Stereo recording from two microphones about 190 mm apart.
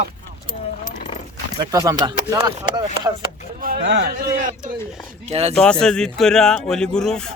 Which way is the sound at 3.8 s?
65° right (ahead or behind).